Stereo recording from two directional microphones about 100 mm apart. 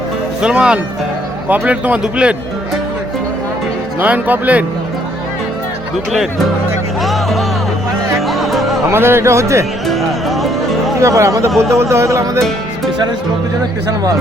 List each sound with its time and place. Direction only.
0.4 s a man's voice: 10° right (ahead or behind)
4.0 s a man's voice: 15° right (ahead or behind)
7.0 s music: centre (ahead or behind)
8.9 s speech: 25° right (ahead or behind)
9.8 s music: centre (ahead or behind)
10.9 s speech: 30° right (ahead or behind)